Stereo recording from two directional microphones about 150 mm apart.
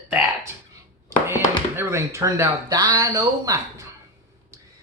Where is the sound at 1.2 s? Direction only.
15° right (ahead or behind).